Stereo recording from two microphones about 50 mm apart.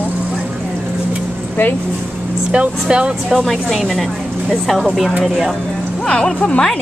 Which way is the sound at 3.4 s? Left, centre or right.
Centre.